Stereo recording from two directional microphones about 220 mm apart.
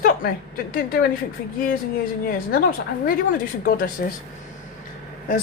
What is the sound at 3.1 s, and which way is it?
Speech, 40° left (ahead or behind).